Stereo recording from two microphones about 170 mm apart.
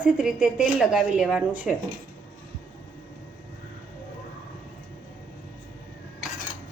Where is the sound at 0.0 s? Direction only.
5° right (ahead or behind).